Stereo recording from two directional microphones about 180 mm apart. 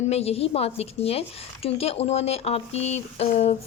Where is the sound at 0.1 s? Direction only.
35° left (ahead or behind).